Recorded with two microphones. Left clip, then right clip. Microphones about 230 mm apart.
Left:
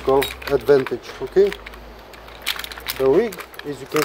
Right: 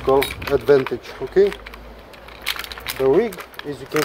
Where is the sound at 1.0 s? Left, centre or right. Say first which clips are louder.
Even; centre.